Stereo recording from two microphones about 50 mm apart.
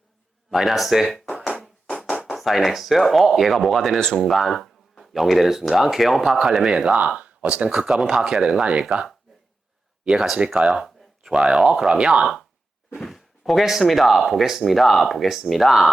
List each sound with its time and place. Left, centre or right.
0.5 s speech: centre
2.2 s speech: centre
7.2 s speech: right
7.7 s speech: centre
10.3 s speech: centre
10.7 s speech: centre
12.2 s speech: centre